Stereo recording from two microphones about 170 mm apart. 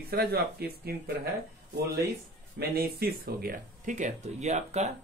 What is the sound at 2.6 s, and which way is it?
A man's voice, 65° right (ahead or behind).